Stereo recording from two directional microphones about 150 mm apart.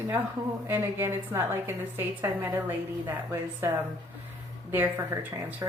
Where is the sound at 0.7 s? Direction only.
15° right (ahead or behind).